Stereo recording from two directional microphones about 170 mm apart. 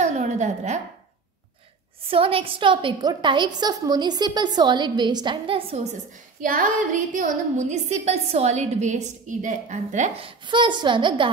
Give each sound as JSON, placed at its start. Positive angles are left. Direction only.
{"t": 0.0, "sound": "a sound", "side_deg": -45}
{"t": 2.0, "sound": "a woman's voice", "side_deg": -35}
{"t": 6.4, "sound": "a woman's voice", "side_deg": -55}